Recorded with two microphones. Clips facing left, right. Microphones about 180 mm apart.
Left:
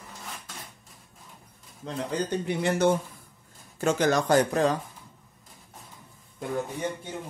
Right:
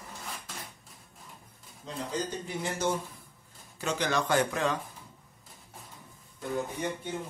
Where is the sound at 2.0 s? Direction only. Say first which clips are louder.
Left 6 dB; 60° left (ahead or behind).